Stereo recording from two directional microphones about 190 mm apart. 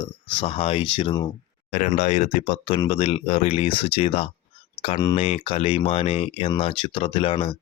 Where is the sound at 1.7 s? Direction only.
40° left (ahead or behind).